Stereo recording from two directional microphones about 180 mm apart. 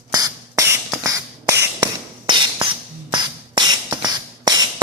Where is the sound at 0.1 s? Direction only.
20° right (ahead or behind).